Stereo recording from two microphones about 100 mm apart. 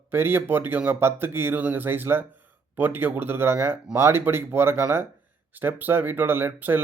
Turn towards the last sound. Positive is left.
turn(degrees=-20)  # may be behind; listen again after turning